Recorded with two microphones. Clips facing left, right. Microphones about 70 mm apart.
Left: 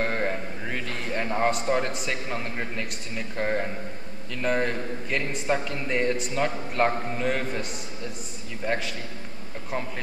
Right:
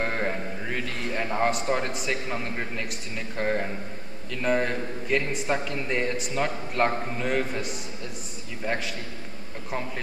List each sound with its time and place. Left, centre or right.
0.0 s a man's voice: centre